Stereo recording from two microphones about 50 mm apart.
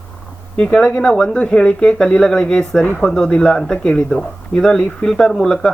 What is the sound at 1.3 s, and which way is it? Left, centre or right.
Speech, left.